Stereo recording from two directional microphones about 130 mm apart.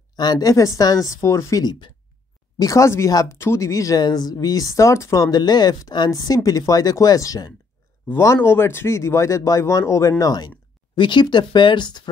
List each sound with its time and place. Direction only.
0.1 s speech: 30° left (ahead or behind)